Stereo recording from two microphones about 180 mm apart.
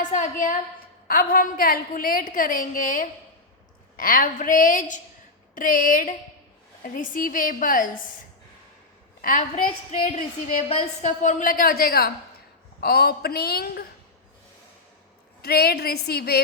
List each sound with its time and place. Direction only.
0.0 s a woman's voice: 45° left (ahead or behind)
9.9 s a woman's voice: 45° left (ahead or behind); by 13.8 s 60° left (ahead or behind)
15.4 s a woman's voice: 60° left (ahead or behind)